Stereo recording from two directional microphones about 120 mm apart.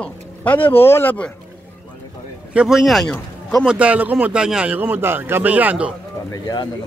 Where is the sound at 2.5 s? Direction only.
5° right (ahead or behind).